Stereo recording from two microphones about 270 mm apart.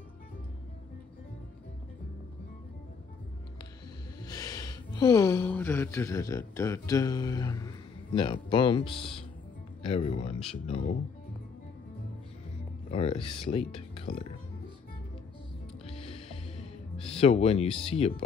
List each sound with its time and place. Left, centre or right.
4.3 s speech: centre
12.9 s speech: left
14.1 s speech: left
15.9 s music: left